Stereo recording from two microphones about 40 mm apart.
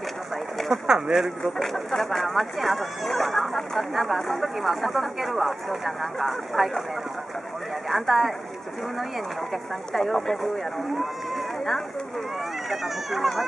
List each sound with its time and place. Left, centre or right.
0.8 s speech: centre
1.4 s speech: centre
7.9 s speech: centre
9.5 s speech: centre